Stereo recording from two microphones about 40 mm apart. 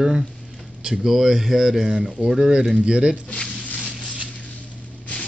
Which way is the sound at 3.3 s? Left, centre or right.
Centre.